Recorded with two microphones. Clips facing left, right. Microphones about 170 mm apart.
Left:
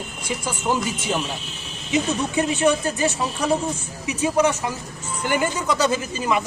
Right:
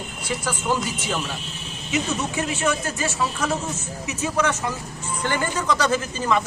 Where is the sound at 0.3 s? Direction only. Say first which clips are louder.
Even; 15° left (ahead or behind).